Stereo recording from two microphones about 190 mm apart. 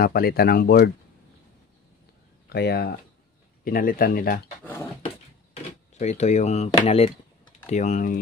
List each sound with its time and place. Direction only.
0.0 s speech: 55° left (ahead or behind)
2.5 s speech: 60° left (ahead or behind)
3.6 s speech: 50° left (ahead or behind)
5.7 s speech: 40° left (ahead or behind)